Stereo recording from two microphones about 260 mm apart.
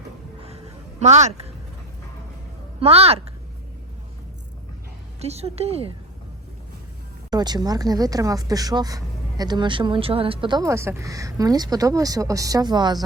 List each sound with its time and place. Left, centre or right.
0.4 s a sound: right
2.8 s a woman's voice: right
5.2 s a woman's voice: right
7.3 s speech: centre